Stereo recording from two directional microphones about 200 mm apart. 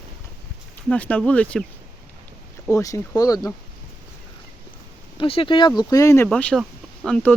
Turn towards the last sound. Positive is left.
turn(degrees=5)  # may be behind; listen again after turning